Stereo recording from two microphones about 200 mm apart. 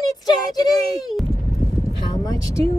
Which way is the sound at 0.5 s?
20° left (ahead or behind).